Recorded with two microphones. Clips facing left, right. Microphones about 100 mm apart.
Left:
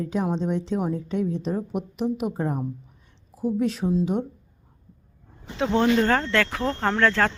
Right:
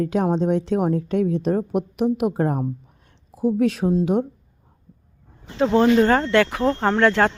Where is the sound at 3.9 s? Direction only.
55° right (ahead or behind).